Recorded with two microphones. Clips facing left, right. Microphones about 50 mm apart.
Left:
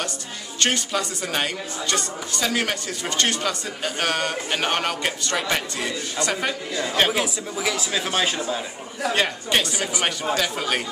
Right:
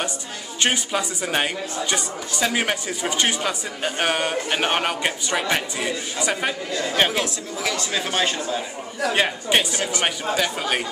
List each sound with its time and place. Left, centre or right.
0.6 s a woman's voice: centre
6.7 s a man's voice: centre
9.1 s a woman's voice: centre